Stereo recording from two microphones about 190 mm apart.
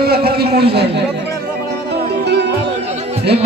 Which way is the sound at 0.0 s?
55° right (ahead or behind).